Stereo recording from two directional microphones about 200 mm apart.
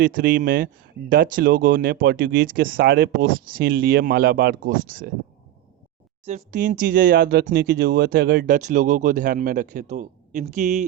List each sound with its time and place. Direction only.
0.0 s speech: 45° right (ahead or behind)
6.2 s speech: 35° right (ahead or behind)